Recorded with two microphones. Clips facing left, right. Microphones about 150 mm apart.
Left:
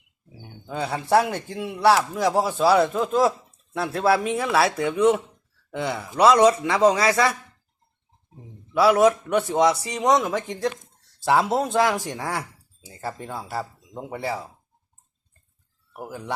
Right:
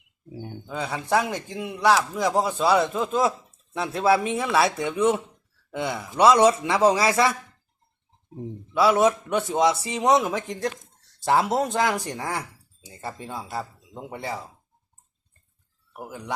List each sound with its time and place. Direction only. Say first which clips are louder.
0.9 s a man's voice: left 4 dB; 10° left (ahead or behind)
9.0 s a man's voice: left 3 dB; centre (ahead or behind)
15.9 s speech: left 2 dB; 5° left (ahead or behind)